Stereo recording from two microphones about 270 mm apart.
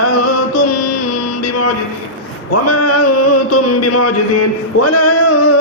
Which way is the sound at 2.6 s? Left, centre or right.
Left.